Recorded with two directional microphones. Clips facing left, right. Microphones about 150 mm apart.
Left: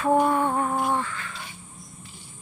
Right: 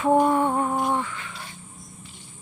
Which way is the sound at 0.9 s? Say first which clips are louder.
Even; 15° right (ahead or behind).